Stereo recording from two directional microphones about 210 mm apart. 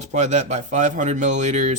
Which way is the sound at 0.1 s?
35° right (ahead or behind).